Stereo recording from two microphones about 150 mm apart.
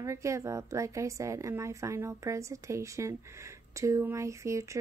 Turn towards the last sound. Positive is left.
turn(degrees=-20)  # may be behind; listen again after turning